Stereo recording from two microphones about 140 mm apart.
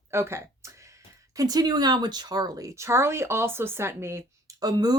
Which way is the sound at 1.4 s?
25° right (ahead or behind).